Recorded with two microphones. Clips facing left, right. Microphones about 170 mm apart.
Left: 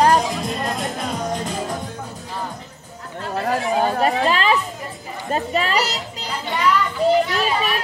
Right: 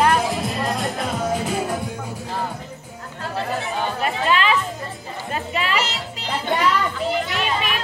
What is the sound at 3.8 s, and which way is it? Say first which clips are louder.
Speech: left 6 dB; 35° left (ahead or behind).